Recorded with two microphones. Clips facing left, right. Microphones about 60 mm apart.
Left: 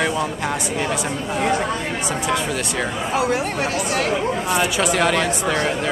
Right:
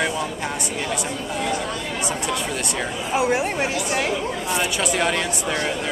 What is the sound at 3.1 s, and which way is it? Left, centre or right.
Speech, centre.